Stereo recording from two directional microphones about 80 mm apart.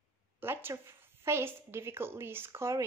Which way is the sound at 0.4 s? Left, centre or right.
Right.